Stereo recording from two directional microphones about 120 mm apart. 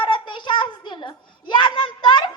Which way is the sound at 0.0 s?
40° left (ahead or behind).